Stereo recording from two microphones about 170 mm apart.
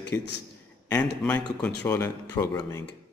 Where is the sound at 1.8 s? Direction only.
15° left (ahead or behind).